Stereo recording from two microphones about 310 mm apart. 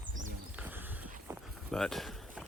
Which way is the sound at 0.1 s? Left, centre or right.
Right.